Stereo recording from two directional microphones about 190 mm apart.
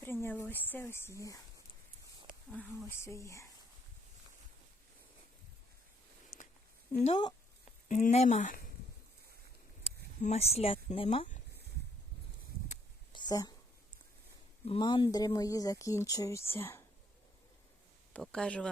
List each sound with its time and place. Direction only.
0.0 s speech: 10° left (ahead or behind)
2.9 s speech: 15° left (ahead or behind)
6.3 s a sound: 15° left (ahead or behind)
7.0 s speech: 35° left (ahead or behind)
10.2 s speech: 35° left (ahead or behind)
13.1 s a sound: 20° left (ahead or behind)
14.6 s speech: 25° left (ahead or behind)
18.1 s speech: 5° left (ahead or behind)